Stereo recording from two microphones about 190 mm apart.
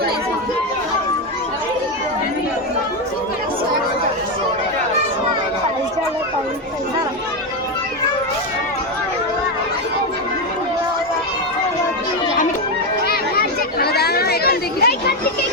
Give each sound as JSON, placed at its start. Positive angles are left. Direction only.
{"t": 13.1, "sound": "chatter", "side_deg": 55}